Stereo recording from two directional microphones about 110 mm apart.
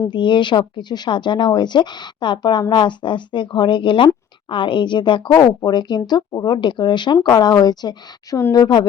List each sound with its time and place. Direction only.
0.1 s speech: 45° left (ahead or behind)